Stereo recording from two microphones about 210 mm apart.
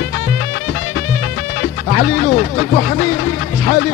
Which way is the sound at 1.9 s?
40° left (ahead or behind).